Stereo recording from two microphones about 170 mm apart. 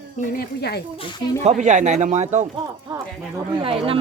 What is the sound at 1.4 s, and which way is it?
Speech, 45° right (ahead or behind).